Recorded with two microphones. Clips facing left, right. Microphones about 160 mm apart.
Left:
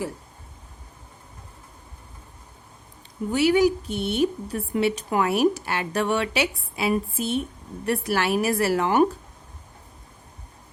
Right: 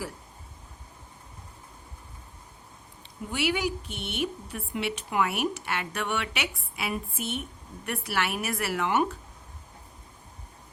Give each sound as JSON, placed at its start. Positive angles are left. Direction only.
{"t": 3.3, "sound": "speech", "side_deg": 40}